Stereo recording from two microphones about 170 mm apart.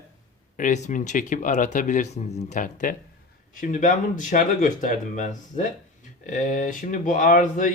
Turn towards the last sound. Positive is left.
turn(degrees=50)  # may be behind; listen again after turning